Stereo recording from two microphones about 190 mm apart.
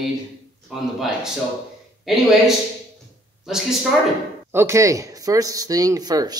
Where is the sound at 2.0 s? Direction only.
Centre (ahead or behind).